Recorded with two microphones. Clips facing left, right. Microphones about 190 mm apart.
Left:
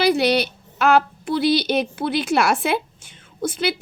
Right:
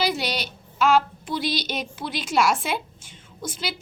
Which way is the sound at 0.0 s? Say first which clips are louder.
Left 8 dB; 60° left (ahead or behind).